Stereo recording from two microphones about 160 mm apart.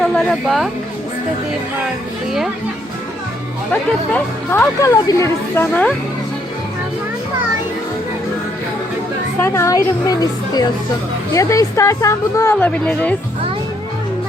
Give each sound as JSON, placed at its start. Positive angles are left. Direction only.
{"t": 0.0, "sound": "a woman's voice", "side_deg": 5}
{"t": 3.7, "sound": "speech", "side_deg": 10}
{"t": 9.4, "sound": "a woman's voice", "side_deg": 15}